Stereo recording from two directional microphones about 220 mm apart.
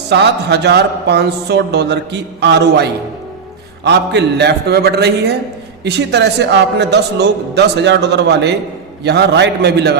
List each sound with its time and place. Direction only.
0.1 s a woman's voice: 50° right (ahead or behind)